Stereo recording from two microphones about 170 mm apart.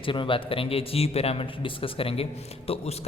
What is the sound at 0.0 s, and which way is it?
A man's voice, 30° left (ahead or behind).